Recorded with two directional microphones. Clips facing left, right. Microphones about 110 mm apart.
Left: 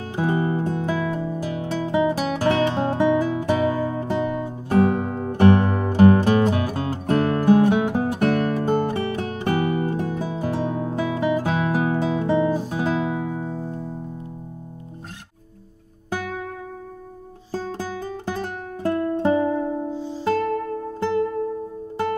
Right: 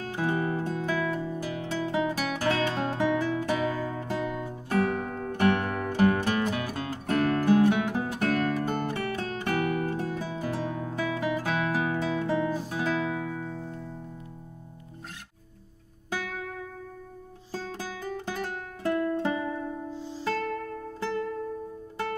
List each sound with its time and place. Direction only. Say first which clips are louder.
0.0 s music: left 5 dB; 20° left (ahead or behind)
16.1 s music: left 6 dB; 35° left (ahead or behind)
17.5 s music: left 7 dB; 40° left (ahead or behind)
19.9 s music: left 8 dB; centre (ahead or behind)
20.2 s music: left 8 dB; 40° left (ahead or behind)